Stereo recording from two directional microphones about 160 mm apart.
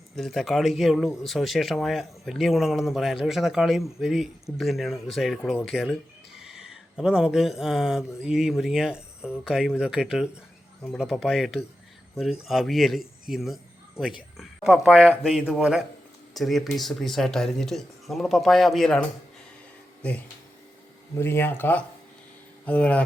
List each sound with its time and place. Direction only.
0.2 s speech: centre (ahead or behind)